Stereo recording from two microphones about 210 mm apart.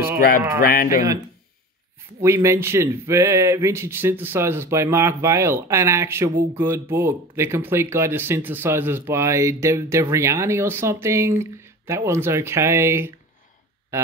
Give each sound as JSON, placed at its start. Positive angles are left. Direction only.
{"t": 0.6, "sound": "speech", "side_deg": 45}
{"t": 2.2, "sound": "speech", "side_deg": -10}